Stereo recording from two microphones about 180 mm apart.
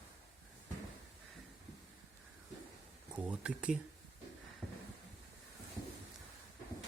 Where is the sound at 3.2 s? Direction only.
5° right (ahead or behind).